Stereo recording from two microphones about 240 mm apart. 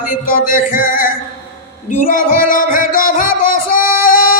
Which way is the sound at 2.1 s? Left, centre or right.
Left.